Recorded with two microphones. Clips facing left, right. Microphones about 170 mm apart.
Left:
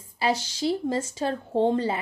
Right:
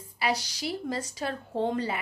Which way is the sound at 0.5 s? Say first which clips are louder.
Left 7 dB; 30° left (ahead or behind).